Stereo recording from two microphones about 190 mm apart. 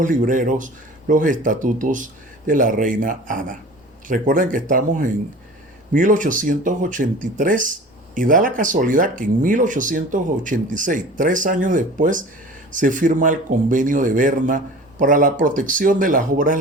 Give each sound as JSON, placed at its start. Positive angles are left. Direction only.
{"t": 0.0, "sound": "speech", "side_deg": -45}